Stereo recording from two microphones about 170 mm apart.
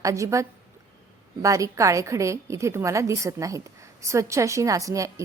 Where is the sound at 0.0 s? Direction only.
20° right (ahead or behind).